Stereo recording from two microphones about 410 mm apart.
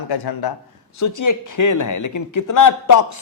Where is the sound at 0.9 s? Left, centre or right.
Left.